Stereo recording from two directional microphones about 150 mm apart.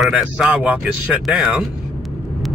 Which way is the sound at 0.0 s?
5° right (ahead or behind).